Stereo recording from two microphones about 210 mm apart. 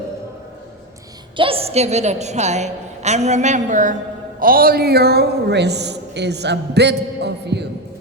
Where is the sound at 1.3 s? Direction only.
25° right (ahead or behind); by 7.6 s 55° right (ahead or behind).